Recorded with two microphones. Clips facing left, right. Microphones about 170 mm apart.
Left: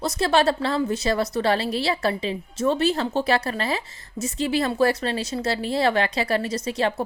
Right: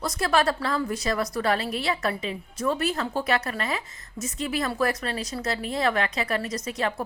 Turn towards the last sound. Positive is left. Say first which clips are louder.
# left 4 dB
turn(degrees=30)  # may be behind; listen again after turning